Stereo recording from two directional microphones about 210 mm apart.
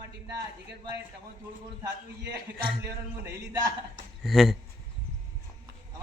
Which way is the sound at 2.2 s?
50° right (ahead or behind).